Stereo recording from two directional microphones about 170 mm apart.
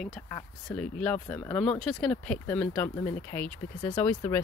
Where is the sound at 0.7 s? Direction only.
5° left (ahead or behind).